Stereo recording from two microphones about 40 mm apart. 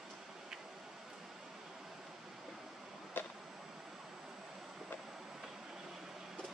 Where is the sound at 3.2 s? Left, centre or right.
Left.